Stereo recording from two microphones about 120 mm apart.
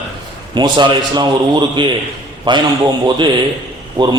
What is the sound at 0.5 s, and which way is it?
A man's voice, 40° right (ahead or behind).